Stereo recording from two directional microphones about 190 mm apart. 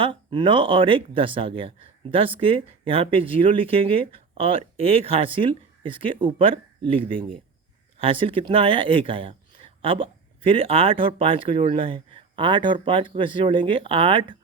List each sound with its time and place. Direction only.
0.0 s speech: 25° right (ahead or behind)